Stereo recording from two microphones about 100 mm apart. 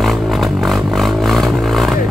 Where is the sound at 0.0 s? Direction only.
Centre (ahead or behind).